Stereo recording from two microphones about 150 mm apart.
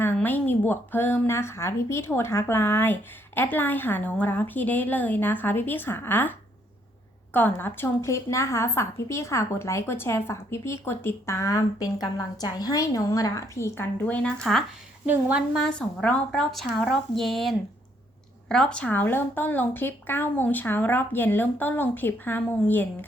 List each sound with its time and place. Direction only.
0.0 s a woman's voice: 15° left (ahead or behind)
7.3 s a woman's voice: 10° left (ahead or behind)
15.0 s a woman's voice: 10° right (ahead or behind)
15.5 s a woman's voice: 5° left (ahead or behind)